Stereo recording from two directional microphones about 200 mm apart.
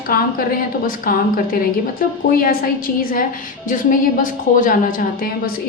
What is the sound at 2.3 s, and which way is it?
A woman's voice, 45° left (ahead or behind).